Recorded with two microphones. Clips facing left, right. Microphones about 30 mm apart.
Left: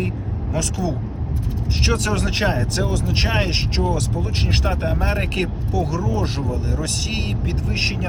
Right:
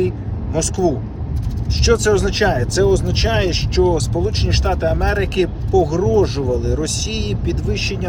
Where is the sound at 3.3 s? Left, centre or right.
Right.